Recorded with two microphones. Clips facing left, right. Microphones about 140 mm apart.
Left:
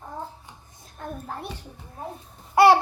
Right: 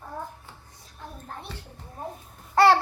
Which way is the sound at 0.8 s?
50° left (ahead or behind).